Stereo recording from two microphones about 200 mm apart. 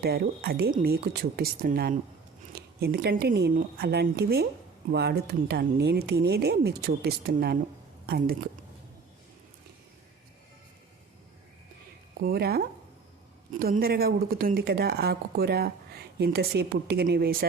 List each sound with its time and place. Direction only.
0.0 s speech: 50° right (ahead or behind)
12.2 s speech: 50° right (ahead or behind)